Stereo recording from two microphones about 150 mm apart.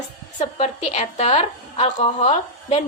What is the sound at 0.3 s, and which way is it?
A woman's voice, 45° left (ahead or behind).